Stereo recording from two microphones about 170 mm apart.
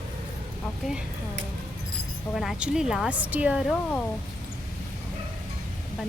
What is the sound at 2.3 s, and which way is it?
Speech, centre (ahead or behind).